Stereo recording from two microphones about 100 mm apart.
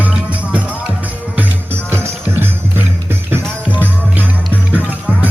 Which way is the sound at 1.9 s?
25° right (ahead or behind).